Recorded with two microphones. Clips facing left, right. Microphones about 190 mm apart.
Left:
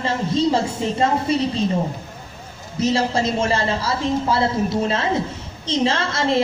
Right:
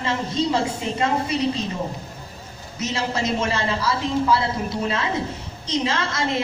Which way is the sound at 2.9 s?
30° left (ahead or behind).